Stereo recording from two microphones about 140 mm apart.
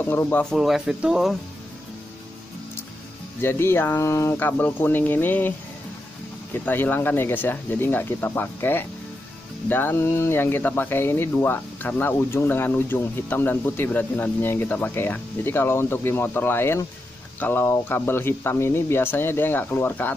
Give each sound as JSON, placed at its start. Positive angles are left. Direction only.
{"t": 0.0, "sound": "speech", "side_deg": 15}
{"t": 0.6, "sound": "speech", "side_deg": -5}
{"t": 3.3, "sound": "speech", "side_deg": 15}
{"t": 6.5, "sound": "speech", "side_deg": 15}